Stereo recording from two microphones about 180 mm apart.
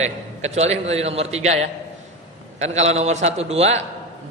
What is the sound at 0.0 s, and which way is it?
A man's voice, 35° right (ahead or behind).